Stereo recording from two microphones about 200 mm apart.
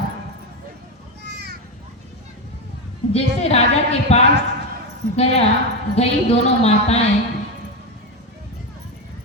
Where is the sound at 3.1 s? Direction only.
30° left (ahead or behind).